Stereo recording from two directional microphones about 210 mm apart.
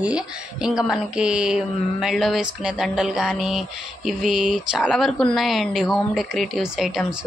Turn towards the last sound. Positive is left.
turn(degrees=0)  # may be behind; listen again after turning